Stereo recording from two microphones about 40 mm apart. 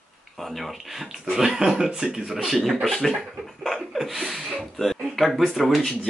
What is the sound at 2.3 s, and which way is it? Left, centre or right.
Speech, centre.